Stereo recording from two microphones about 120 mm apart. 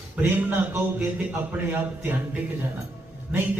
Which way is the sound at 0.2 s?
20° right (ahead or behind).